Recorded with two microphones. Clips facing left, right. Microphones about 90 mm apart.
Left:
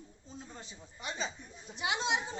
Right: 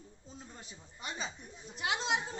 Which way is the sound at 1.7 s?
5° left (ahead or behind).